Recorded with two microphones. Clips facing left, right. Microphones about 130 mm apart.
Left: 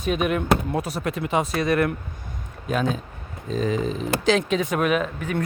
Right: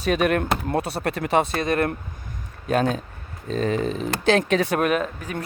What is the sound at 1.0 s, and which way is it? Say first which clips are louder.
Speech: right 3 dB; 70° right (ahead or behind).